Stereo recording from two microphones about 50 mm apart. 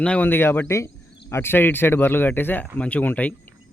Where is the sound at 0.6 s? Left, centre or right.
Left.